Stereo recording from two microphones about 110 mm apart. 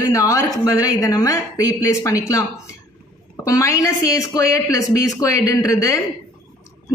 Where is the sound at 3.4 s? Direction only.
30° left (ahead or behind).